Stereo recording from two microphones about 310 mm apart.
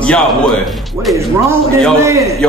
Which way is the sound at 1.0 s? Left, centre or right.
Centre.